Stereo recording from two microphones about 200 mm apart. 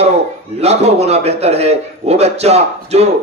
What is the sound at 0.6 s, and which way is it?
A man's voice, 35° right (ahead or behind).